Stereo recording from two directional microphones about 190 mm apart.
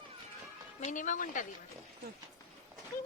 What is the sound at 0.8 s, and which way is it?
Speech, 40° left (ahead or behind).